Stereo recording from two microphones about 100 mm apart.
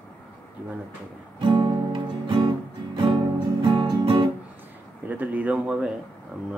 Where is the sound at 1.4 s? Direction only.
55° right (ahead or behind).